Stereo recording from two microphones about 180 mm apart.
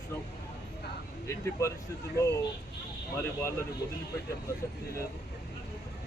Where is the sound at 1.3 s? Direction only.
15° left (ahead or behind).